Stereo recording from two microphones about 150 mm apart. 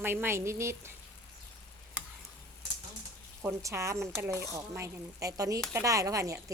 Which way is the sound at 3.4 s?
20° right (ahead or behind).